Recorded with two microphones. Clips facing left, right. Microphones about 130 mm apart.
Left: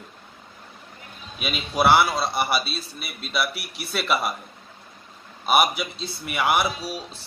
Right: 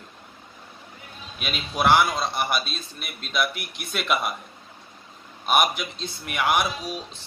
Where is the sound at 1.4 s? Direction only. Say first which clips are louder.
Left 2 dB; 5° left (ahead or behind).